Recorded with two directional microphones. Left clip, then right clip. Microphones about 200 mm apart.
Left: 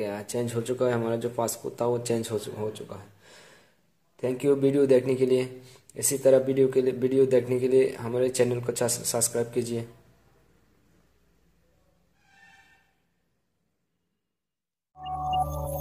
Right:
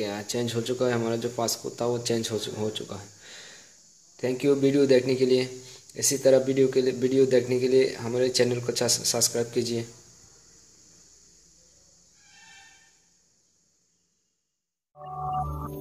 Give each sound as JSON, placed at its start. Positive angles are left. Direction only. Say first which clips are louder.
{"t": 0.0, "sound": "speech", "louder": "right 1 dB", "side_deg": -10}
{"t": 2.5, "sound": "speech", "louder": "right 2 dB", "side_deg": -25}
{"t": 3.3, "sound": "sniff", "louder": "right 6 dB", "side_deg": -10}
{"t": 4.2, "sound": "speech", "louder": "even", "side_deg": -10}